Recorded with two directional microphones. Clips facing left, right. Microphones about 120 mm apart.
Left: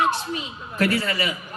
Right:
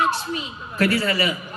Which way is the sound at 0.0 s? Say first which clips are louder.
Even; 20° left (ahead or behind).